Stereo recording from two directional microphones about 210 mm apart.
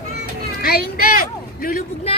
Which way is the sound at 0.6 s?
45° left (ahead or behind).